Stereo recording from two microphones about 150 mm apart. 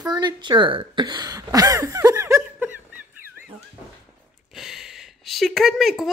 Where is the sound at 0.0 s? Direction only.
30° right (ahead or behind).